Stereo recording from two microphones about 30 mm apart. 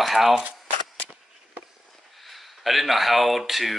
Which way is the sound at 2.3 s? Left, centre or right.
Centre.